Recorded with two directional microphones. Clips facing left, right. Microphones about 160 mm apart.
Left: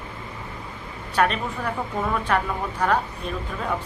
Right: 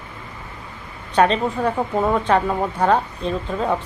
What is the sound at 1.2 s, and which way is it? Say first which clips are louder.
A woman's voice: right 6 dB; 30° right (ahead or behind).